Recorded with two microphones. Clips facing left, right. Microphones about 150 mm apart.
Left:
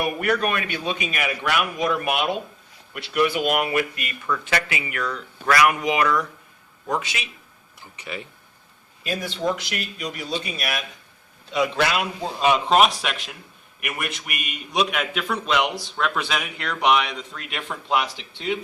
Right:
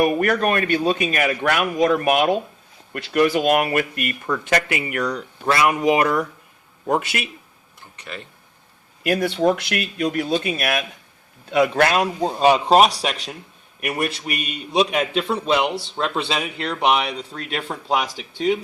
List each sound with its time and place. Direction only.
0.0 s a man's voice: 45° right (ahead or behind)
5.5 s speech: 25° right (ahead or behind)
5.8 s a man's voice: 45° right (ahead or behind)
6.9 s speech: 55° right (ahead or behind)
7.8 s speech: 5° left (ahead or behind)
9.0 s a man's voice: 65° right (ahead or behind); by 18.2 s 35° right (ahead or behind)